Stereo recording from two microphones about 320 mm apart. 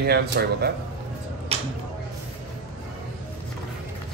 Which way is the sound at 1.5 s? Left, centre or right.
Centre.